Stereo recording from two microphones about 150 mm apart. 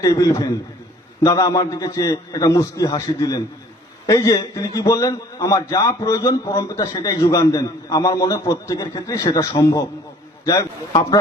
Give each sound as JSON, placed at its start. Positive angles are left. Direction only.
{"t": 0.0, "sound": "a man's voice", "side_deg": 25}